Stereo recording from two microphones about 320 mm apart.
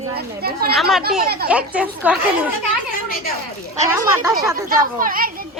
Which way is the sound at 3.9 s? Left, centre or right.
Centre.